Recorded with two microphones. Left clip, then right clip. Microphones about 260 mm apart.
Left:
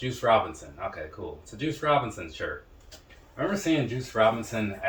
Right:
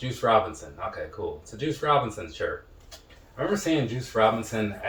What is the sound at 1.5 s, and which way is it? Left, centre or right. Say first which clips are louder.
Speech: even; centre.